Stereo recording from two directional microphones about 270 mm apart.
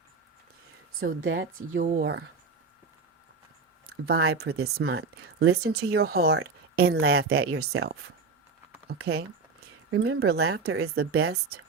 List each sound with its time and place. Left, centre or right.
1.2 s speech: right
1.7 s speech: right
4.0 s speech: right
9.9 s speech: right
10.2 s speech: right